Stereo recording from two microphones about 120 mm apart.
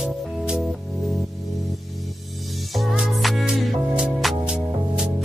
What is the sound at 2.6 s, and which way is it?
Music, centre (ahead or behind).